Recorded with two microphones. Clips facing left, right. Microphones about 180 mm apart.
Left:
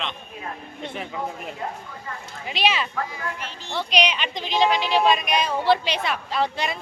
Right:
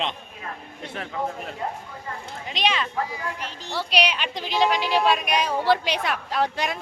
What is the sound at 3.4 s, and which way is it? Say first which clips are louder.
Speech: right 1 dB; 40° right (ahead or behind).